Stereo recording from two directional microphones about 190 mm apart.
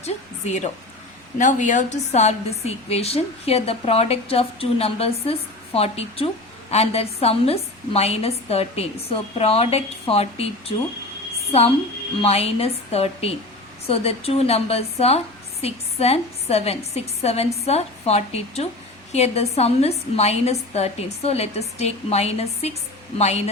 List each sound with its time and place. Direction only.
0.0 s a sound: 35° left (ahead or behind)
1.4 s a woman's voice: 40° left (ahead or behind)
12.2 s a woman's voice: 30° left (ahead or behind)